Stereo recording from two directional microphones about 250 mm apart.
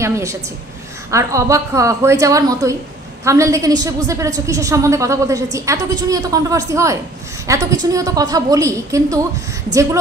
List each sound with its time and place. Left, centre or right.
0.0 s a woman's voice: centre